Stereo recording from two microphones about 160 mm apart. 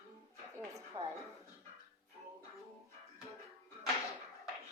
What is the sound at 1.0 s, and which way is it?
Speech, 20° right (ahead or behind).